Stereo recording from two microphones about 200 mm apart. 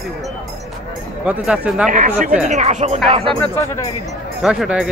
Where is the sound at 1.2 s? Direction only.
5° right (ahead or behind).